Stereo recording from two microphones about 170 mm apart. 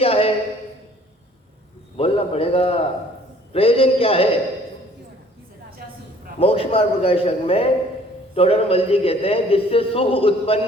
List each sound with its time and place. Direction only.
0.0 s a sound: 35° left (ahead or behind)
2.0 s a man's voice: 35° left (ahead or behind)
6.4 s a man's voice: 35° left (ahead or behind)